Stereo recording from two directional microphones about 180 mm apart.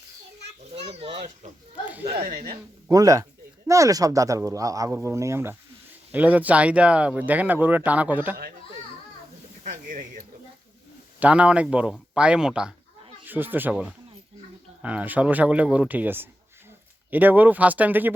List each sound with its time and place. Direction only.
0.7 s speech: 35° right (ahead or behind)
1.8 s speech: 10° right (ahead or behind)
2.2 s speech: 40° right (ahead or behind)
2.9 s speech: 20° right (ahead or behind)
9.6 s speech: 50° right (ahead or behind)
11.2 s speech: 5° right (ahead or behind)